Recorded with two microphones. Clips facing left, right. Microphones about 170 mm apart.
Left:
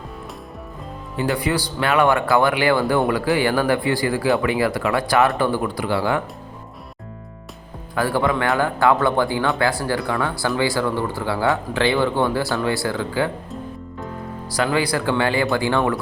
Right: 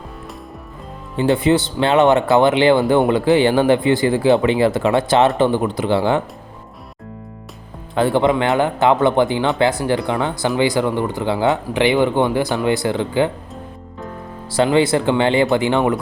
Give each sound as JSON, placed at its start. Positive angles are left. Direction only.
{"t": 1.1, "sound": "speech", "side_deg": -25}
{"t": 7.9, "sound": "speech", "side_deg": -25}
{"t": 14.5, "sound": "speech", "side_deg": -25}